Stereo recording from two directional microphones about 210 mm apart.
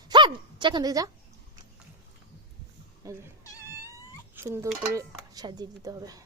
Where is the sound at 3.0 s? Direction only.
10° right (ahead or behind).